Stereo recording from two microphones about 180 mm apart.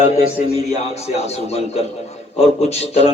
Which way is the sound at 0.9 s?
35° left (ahead or behind).